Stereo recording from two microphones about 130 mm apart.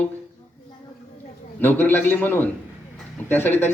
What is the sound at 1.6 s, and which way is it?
A man's voice, 15° left (ahead or behind).